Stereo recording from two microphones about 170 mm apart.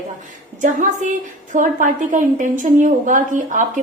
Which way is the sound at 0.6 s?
50° right (ahead or behind).